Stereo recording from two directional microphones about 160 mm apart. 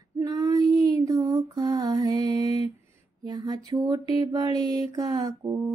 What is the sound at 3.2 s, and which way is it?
Mantra, 25° right (ahead or behind).